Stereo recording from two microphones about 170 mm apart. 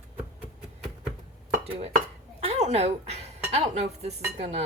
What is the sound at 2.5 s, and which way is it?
Speech, 40° right (ahead or behind).